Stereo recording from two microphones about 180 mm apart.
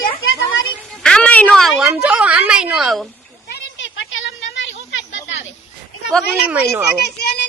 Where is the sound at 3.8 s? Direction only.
90° left.